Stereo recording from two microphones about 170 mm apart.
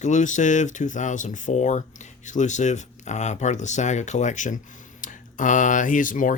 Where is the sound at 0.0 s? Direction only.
45° left (ahead or behind).